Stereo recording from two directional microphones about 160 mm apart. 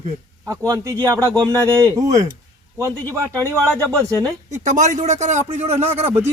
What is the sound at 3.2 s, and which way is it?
Speech, 15° right (ahead or behind).